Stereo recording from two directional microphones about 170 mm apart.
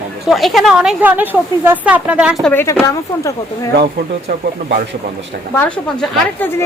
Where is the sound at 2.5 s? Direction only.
15° left (ahead or behind).